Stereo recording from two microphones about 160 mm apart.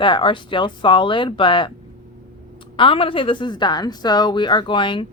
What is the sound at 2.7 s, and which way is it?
A woman's voice, 35° left (ahead or behind).